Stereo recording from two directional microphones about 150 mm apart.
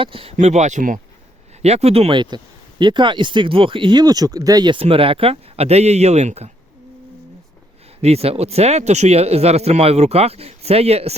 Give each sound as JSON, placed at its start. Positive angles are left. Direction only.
{"t": 0.0, "sound": "speech", "side_deg": -35}
{"t": 0.3, "sound": "speech", "side_deg": -50}
{"t": 1.6, "sound": "speech", "side_deg": -45}
{"t": 8.0, "sound": "speech", "side_deg": -45}